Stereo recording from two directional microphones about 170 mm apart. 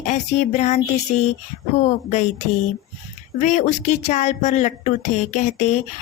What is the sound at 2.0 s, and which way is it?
Speech, 45° left (ahead or behind).